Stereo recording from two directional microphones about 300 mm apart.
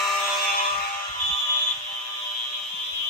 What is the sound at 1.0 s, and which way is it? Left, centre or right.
Music, centre.